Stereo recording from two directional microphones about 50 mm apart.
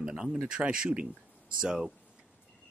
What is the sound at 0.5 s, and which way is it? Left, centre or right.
Speech, centre.